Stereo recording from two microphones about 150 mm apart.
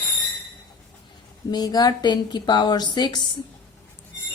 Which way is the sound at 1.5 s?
25° left (ahead or behind).